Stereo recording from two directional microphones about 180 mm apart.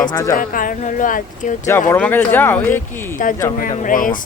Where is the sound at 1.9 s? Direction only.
10° left (ahead or behind).